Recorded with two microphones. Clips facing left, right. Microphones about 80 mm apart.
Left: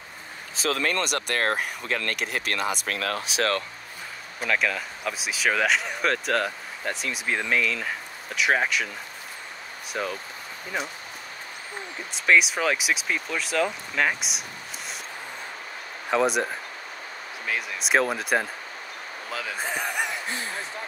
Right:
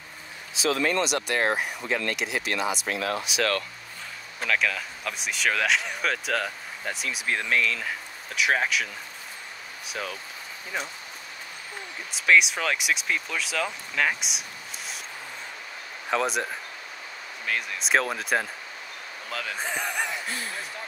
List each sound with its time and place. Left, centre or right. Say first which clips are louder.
0.6 s speech: right 1 dB; left
3.3 s speech: left 3 dB; left
4.4 s speech: left 1 dB; centre
9.8 s speech: left 4 dB; centre
12.1 s speech: even; centre
16.1 s speech: left 3 dB; centre
17.5 s speech: even; centre